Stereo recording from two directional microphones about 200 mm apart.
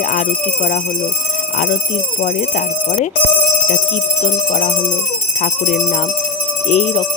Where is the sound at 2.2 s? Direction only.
40° left (ahead or behind).